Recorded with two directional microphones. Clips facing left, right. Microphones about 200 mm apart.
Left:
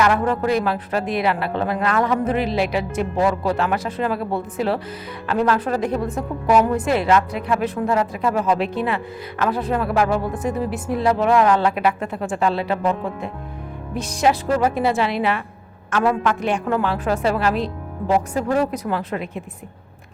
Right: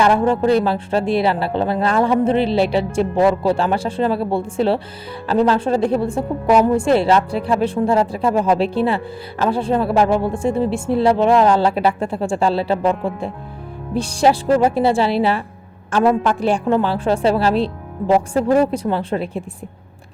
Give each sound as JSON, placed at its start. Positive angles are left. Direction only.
{"t": 0.0, "sound": "a woman's voice", "side_deg": -30}